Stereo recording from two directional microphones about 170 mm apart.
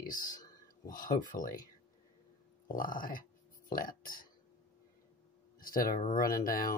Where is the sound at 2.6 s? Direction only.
55° left (ahead or behind).